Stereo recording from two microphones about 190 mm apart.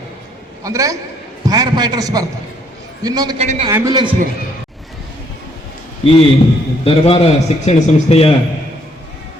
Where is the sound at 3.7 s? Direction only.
20° right (ahead or behind).